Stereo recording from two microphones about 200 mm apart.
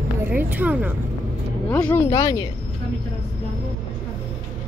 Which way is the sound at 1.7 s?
15° left (ahead or behind).